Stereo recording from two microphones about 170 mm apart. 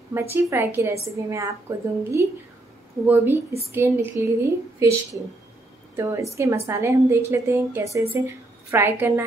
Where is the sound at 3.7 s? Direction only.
15° right (ahead or behind).